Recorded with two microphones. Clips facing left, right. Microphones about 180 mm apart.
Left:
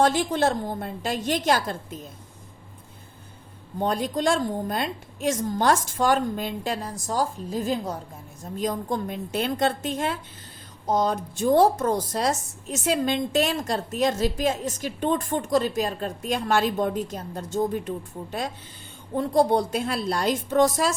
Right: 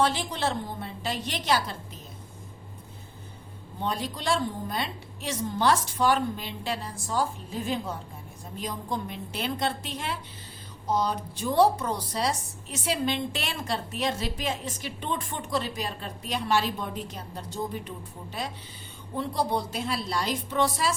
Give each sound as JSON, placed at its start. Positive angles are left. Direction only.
{"t": 0.0, "sound": "a woman's voice", "side_deg": 45}
{"t": 3.8, "sound": "a woman's voice", "side_deg": 50}